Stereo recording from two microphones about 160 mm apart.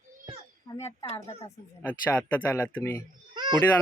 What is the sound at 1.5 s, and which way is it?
Speech, 10° left (ahead or behind).